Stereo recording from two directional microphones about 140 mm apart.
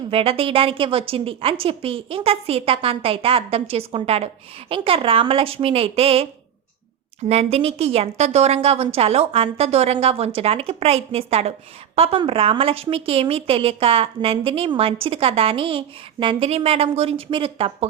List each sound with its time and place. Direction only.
0.1 s a woman's voice: 40° right (ahead or behind)
7.3 s a woman's voice: 50° right (ahead or behind)